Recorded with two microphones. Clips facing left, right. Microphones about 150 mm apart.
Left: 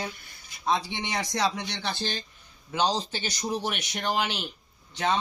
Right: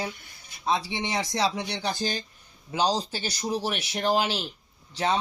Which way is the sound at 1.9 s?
40° right (ahead or behind).